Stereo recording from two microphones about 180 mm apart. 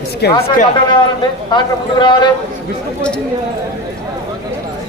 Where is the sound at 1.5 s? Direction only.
25° left (ahead or behind).